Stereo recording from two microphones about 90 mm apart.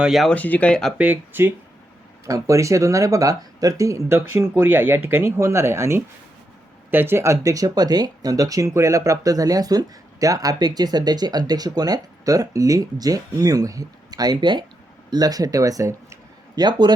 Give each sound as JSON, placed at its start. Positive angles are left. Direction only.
{"t": 0.0, "sound": "speech", "side_deg": 0}
{"t": 0.3, "sound": "speech", "side_deg": 15}
{"t": 0.9, "sound": "speech", "side_deg": -20}
{"t": 2.2, "sound": "speech", "side_deg": -35}
{"t": 16.6, "sound": "a man's voice", "side_deg": -55}